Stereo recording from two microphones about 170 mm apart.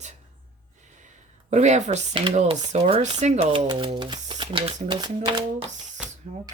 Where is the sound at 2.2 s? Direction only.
30° right (ahead or behind).